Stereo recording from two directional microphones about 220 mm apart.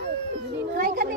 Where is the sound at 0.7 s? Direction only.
40° right (ahead or behind).